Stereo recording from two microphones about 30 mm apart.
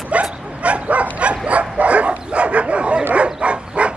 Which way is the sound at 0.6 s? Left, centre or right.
Right.